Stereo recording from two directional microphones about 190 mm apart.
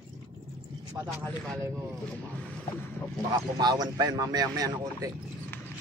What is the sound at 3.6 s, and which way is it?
Speech, 20° right (ahead or behind).